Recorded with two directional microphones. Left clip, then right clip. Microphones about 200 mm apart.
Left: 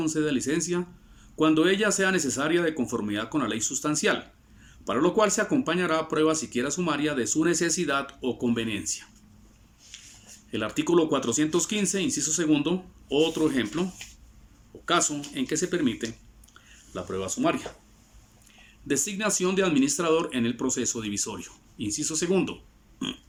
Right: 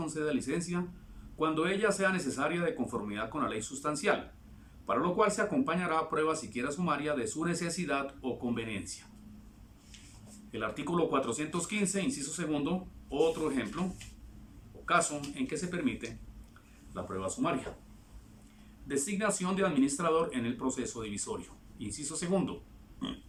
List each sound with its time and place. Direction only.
0.0 s speech: 20° left (ahead or behind)
10.5 s speech: 15° left (ahead or behind)
14.8 s speech: 20° left (ahead or behind)
18.9 s speech: 20° left (ahead or behind)